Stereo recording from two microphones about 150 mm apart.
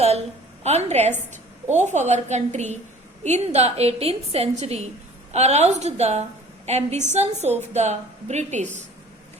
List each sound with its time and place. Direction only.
0.6 s a woman's voice: 45° right (ahead or behind)